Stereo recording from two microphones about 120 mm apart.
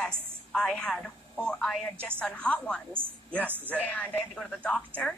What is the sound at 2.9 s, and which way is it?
Speech, 15° right (ahead or behind).